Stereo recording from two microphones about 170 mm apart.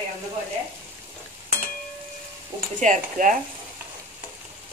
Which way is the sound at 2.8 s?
50° right (ahead or behind).